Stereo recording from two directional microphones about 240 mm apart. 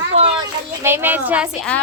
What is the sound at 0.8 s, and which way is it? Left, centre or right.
Speech, centre.